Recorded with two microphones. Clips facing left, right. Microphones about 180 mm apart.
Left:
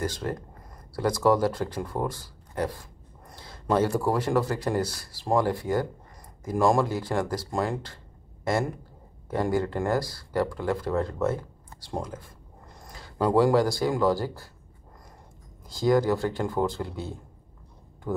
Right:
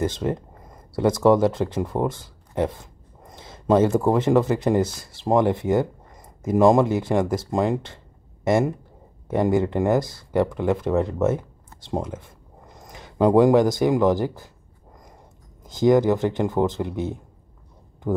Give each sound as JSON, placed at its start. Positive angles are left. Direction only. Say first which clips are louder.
{"t": 0.0, "sound": "speech", "louder": "right 6 dB", "side_deg": -25}
{"t": 9.3, "sound": "speech", "louder": "right 5 dB", "side_deg": -20}
{"t": 15.6, "sound": "speech", "louder": "right 5 dB", "side_deg": -20}